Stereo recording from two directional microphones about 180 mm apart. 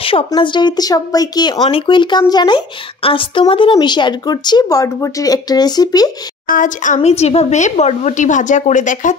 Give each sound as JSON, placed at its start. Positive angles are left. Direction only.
{"t": 0.0, "sound": "speech", "side_deg": 30}
{"t": 6.4, "sound": "speech", "side_deg": 50}